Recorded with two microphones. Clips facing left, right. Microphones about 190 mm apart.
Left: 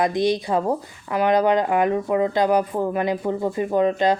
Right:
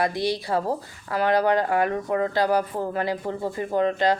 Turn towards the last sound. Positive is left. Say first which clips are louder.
# left 3 dB
turn(degrees=20)  # may be behind; listen again after turning